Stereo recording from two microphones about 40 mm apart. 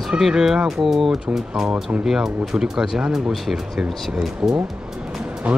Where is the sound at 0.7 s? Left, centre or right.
Centre.